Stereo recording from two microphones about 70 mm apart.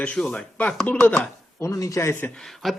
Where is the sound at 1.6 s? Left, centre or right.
Left.